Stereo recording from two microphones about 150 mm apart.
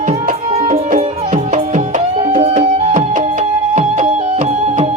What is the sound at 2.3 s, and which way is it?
Music, 45° right (ahead or behind).